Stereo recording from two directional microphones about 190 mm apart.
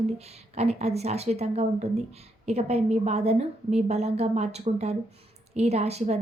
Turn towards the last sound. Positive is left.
turn(degrees=-35)  # may be behind; listen again after turning